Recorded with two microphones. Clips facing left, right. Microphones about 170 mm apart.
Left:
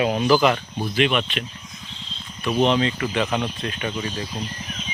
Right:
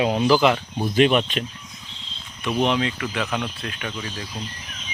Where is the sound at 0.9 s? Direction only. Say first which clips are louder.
Right 4 dB; 40° right (ahead or behind).